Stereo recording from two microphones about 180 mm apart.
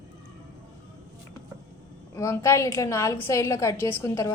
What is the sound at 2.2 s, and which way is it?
A woman's voice, 15° left (ahead or behind).